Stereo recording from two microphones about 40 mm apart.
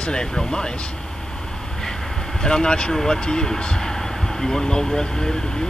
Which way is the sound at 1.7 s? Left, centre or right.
Centre.